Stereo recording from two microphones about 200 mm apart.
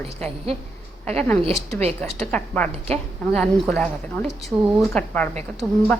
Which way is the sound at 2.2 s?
5° left (ahead or behind).